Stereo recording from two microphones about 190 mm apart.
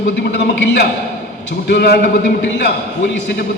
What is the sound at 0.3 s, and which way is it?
A man's voice, 70° left (ahead or behind).